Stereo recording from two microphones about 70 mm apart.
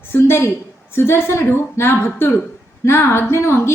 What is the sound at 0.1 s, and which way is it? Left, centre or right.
A woman's voice, left.